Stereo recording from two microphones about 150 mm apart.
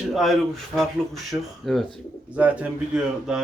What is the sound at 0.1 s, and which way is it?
Speech, centre (ahead or behind).